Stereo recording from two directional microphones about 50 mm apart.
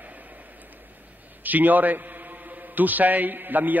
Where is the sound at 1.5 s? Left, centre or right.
Right.